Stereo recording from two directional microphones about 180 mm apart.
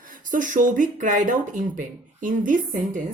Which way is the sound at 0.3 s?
45° right (ahead or behind).